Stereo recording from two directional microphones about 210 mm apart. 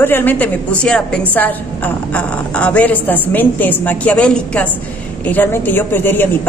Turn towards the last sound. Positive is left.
turn(degrees=10)  # may be behind; listen again after turning